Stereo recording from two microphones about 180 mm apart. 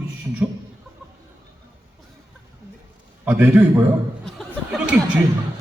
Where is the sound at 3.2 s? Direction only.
10° right (ahead or behind).